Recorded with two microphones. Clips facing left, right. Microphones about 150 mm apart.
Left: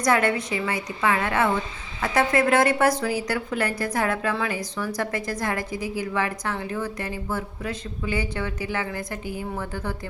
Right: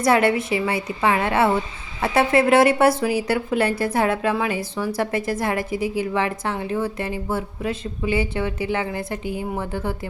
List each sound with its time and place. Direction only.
0.0 s a woman's voice: 20° right (ahead or behind)